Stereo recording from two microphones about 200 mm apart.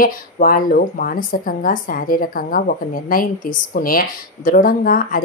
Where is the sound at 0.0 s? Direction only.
45° left (ahead or behind).